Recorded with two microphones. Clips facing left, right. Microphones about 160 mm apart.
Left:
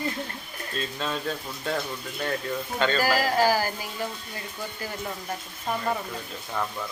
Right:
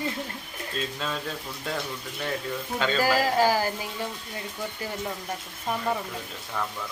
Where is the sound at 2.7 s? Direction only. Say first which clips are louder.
Left 2 dB; 5° right (ahead or behind).